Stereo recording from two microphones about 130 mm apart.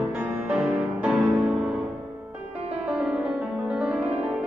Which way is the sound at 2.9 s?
10° right (ahead or behind).